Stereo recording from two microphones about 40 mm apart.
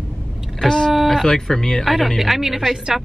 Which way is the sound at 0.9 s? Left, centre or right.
Centre.